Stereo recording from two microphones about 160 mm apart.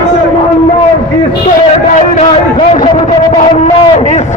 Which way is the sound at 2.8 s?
30° left (ahead or behind).